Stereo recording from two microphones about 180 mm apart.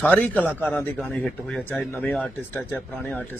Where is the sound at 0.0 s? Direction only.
10° left (ahead or behind).